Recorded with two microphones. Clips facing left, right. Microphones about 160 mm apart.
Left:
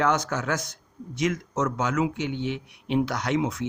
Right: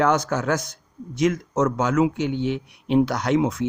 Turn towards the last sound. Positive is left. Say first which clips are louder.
# right 5 dB
turn(degrees=-40)  # may be behind; listen again after turning